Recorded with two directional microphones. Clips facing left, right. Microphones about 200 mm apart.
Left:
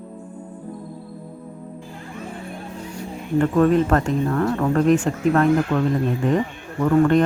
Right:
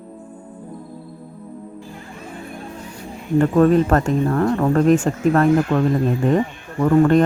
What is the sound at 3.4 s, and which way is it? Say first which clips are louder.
Speech: right 2 dB; 40° right (ahead or behind).